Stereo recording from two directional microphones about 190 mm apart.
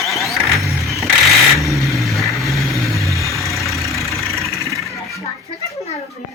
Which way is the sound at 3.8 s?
Centre (ahead or behind).